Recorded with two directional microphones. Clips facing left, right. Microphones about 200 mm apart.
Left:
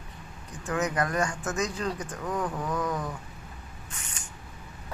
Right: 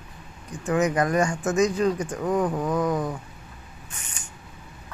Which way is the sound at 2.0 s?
30° right (ahead or behind).